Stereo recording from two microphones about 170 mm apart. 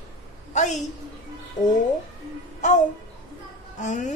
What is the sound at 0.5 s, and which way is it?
Speech, 45° left (ahead or behind).